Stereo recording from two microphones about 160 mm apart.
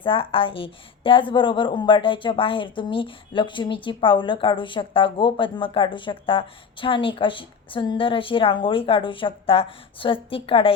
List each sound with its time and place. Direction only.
0.0 s a woman's voice: 35° left (ahead or behind)